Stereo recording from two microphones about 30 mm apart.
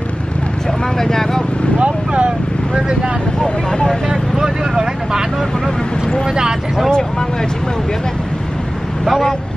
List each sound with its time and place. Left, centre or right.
0.9 s speech: centre
1.8 s speech: right
3.4 s speech: left
6.9 s speech: left